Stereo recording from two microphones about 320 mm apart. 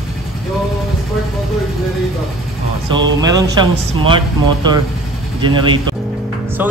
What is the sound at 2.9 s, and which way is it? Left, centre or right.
Speech, centre.